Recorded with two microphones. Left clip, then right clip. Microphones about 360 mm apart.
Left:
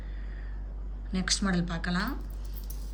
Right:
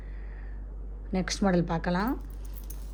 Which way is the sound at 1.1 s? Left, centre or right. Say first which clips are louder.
Right 2 dB; centre.